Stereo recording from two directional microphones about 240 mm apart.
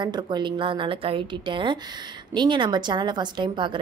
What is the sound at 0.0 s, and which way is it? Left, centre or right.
A woman's voice, centre.